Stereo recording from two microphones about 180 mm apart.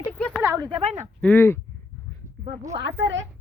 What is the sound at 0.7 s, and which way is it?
Speech, 35° right (ahead or behind).